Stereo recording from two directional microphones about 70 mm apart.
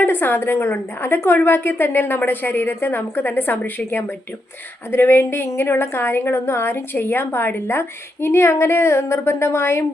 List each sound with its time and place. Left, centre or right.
0.0 s a woman's voice: left